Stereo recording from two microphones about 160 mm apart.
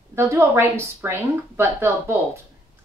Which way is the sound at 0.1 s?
20° right (ahead or behind).